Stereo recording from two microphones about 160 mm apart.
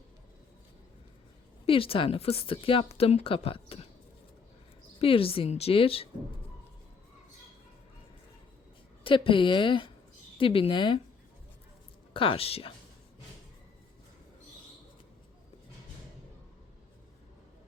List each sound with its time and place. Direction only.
1.6 s a woman's voice: 35° left (ahead or behind)
4.9 s a woman's voice: 35° left (ahead or behind)
9.0 s a woman's voice: 30° left (ahead or behind)
12.1 s a woman's voice: 35° left (ahead or behind)